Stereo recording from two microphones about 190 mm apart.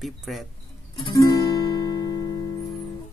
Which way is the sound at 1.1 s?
20° left (ahead or behind).